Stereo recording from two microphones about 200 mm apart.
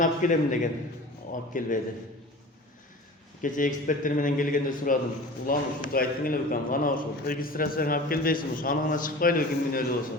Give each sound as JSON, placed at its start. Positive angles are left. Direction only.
{"t": 0.0, "sound": "a man's voice", "side_deg": 40}
{"t": 3.4, "sound": "a man's voice", "side_deg": 40}